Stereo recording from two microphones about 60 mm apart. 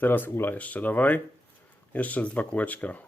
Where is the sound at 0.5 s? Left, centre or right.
Left.